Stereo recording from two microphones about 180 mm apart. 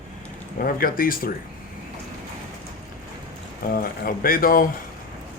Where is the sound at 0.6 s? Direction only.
50° left (ahead or behind).